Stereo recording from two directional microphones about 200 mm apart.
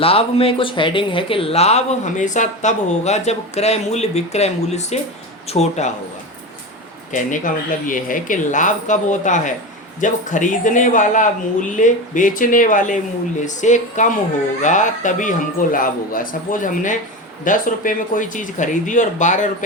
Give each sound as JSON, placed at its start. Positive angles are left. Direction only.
{"t": 0.0, "sound": "speech", "side_deg": 30}
{"t": 7.1, "sound": "speech", "side_deg": 40}